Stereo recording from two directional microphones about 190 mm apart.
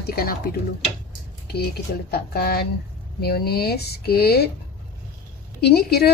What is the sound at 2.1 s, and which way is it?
A woman's voice, 55° left (ahead or behind).